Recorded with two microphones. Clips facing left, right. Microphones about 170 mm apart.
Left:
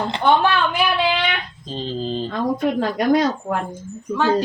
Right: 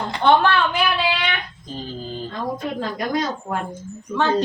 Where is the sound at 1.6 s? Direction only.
25° left (ahead or behind).